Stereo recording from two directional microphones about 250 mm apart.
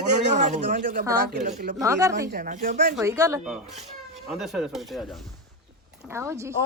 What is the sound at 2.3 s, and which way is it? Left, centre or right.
Speech, right.